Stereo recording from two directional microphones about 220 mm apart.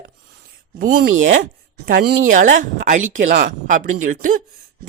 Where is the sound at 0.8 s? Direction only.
40° right (ahead or behind).